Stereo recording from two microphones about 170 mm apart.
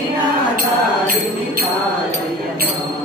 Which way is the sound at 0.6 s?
55° right (ahead or behind).